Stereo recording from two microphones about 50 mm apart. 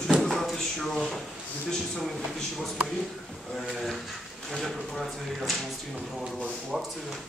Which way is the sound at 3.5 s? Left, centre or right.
Centre.